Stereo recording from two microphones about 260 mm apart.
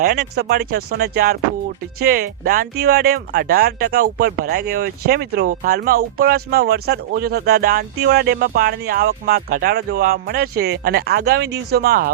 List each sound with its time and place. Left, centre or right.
0.0 s speech: right